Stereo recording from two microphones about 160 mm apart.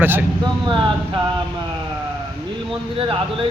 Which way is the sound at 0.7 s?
30° right (ahead or behind).